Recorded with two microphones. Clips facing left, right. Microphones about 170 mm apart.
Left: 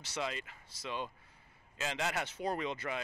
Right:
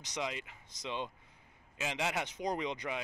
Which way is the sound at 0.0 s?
15° right (ahead or behind).